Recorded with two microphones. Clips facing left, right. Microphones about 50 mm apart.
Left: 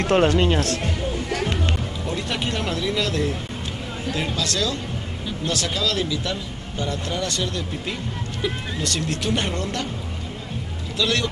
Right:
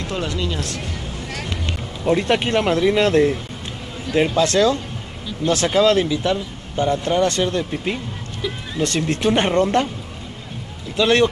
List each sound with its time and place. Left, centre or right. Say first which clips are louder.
0.0 s speech: left 7 dB; left
2.0 s speech: right 10 dB; right
4.4 s speech: right 9 dB; right
11.0 s speech: right 8 dB; right